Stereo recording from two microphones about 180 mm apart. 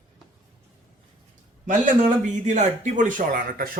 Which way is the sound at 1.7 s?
40° right (ahead or behind).